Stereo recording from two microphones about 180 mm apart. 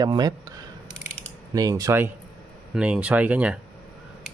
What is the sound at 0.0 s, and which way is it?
Speech, 20° right (ahead or behind).